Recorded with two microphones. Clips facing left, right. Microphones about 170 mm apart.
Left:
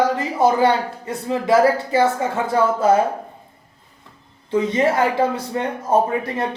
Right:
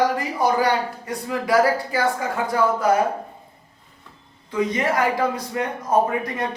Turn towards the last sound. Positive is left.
turn(degrees=30)  # may be behind; listen again after turning